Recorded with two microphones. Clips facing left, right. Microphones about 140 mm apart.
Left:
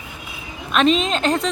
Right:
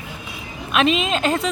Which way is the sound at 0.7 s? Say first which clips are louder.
Left 1 dB; 5° right (ahead or behind).